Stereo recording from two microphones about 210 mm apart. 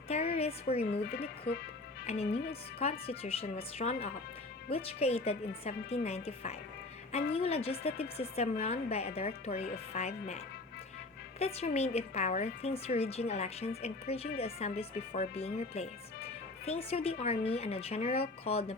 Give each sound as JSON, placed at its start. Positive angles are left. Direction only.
{"t": 0.1, "sound": "a woman's voice", "side_deg": 30}
{"t": 2.0, "sound": "a woman's voice", "side_deg": 30}